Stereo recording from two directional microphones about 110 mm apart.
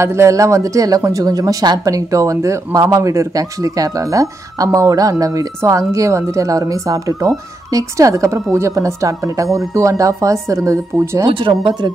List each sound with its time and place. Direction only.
0.0 s speech: 25° right (ahead or behind)
11.2 s speech: 50° right (ahead or behind)